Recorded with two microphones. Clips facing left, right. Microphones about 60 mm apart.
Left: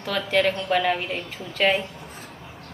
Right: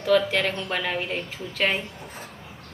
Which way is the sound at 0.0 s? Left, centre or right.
Centre.